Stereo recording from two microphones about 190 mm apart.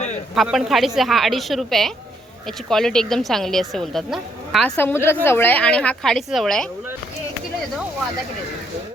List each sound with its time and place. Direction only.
0.3 s speech: centre (ahead or behind)
4.7 s a woman's voice: 10° left (ahead or behind)